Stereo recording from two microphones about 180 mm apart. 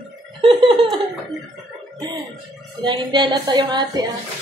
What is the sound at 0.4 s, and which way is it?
Laughter, 30° right (ahead or behind).